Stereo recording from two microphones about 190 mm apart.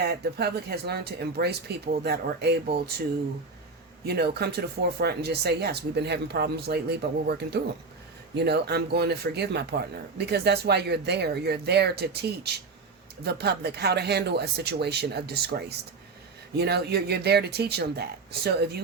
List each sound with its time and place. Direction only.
0.0 s speech: 60° right (ahead or behind)
4.0 s speech: 60° right (ahead or behind)